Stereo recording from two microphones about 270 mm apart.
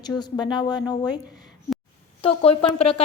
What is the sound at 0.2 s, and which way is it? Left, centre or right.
A woman's voice, centre.